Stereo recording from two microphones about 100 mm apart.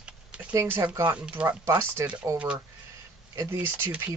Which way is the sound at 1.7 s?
30° right (ahead or behind).